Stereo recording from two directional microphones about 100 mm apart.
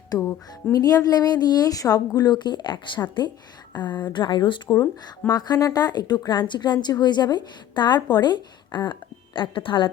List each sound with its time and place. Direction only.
0.2 s a woman's voice: 35° left (ahead or behind); by 9.9 s 55° left (ahead or behind)